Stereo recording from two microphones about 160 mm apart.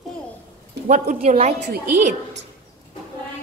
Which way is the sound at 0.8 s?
55° right (ahead or behind).